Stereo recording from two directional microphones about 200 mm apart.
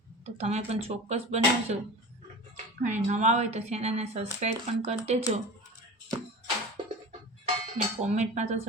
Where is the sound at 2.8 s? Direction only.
35° right (ahead or behind).